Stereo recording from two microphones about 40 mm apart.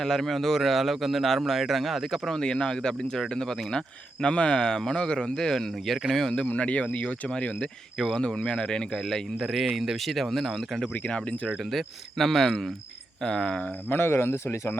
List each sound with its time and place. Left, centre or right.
0.0 s a man's voice: centre
2.1 s speech: centre
6.6 s speech: left
9.4 s a man's voice: centre
10.1 s a man's voice: centre
13.2 s speech: centre
13.9 s speech: left